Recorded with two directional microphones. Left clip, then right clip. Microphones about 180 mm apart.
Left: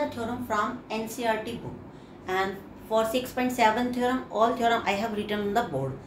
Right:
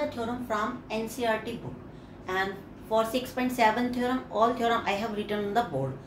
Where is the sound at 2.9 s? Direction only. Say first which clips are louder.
Left 1 dB; centre (ahead or behind).